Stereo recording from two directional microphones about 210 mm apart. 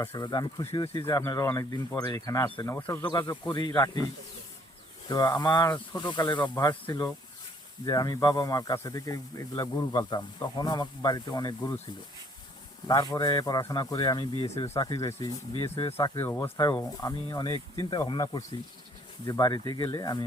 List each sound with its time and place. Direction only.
0.1 s speech: 20° left (ahead or behind)
5.0 s speech: 20° left (ahead or behind)
12.9 s speech: 20° left (ahead or behind)